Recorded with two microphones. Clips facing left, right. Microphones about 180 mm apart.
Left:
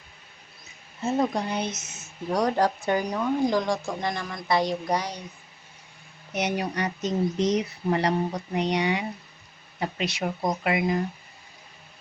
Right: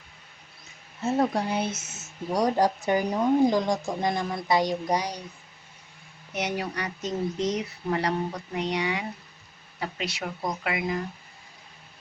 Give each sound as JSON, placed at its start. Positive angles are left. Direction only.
{"t": 1.0, "sound": "a woman's voice", "side_deg": -5}
{"t": 6.3, "sound": "speech", "side_deg": 20}